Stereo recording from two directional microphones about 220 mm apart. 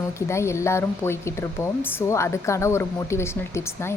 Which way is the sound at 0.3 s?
15° left (ahead or behind).